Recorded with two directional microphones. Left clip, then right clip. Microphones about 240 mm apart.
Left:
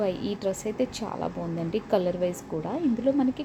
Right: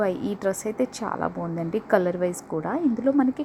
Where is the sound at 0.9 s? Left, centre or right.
Right.